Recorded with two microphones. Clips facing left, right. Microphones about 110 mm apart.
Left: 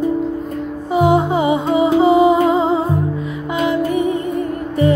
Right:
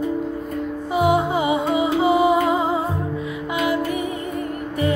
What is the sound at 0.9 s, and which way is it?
Music, 25° left (ahead or behind).